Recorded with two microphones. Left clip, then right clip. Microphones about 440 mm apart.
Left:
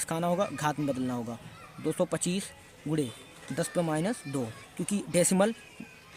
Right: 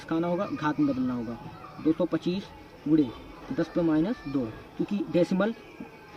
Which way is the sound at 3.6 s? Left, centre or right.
Left.